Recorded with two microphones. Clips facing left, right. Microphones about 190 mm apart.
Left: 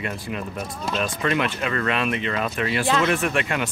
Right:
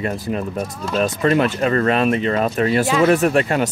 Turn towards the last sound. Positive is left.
turn(degrees=-40)  # may be behind; listen again after turning